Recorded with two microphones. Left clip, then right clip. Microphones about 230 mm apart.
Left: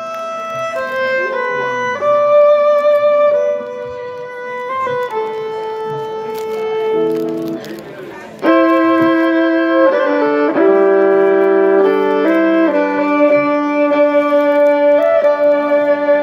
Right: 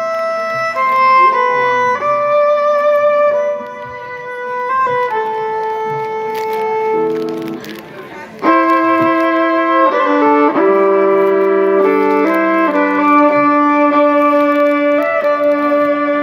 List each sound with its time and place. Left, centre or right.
1.3 s music: right
4.8 s music: right
8.5 s music: right